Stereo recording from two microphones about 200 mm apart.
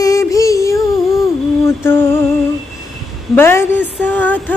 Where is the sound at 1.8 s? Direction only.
10° left (ahead or behind).